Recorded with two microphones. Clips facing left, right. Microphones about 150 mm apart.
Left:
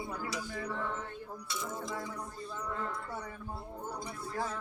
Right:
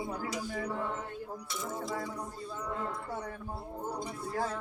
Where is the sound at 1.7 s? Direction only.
35° right (ahead or behind).